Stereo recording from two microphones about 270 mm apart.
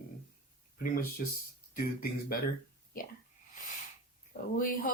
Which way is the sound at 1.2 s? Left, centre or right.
Left.